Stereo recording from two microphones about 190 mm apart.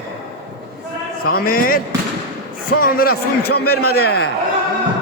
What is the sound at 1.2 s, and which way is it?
Speech, 50° left (ahead or behind).